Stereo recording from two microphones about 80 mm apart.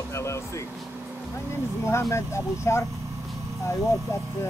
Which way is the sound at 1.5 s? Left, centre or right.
Left.